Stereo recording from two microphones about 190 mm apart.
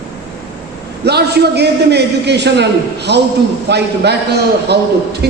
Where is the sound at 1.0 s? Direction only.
60° right (ahead or behind).